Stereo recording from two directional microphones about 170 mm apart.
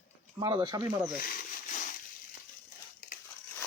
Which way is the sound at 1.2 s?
50° left (ahead or behind).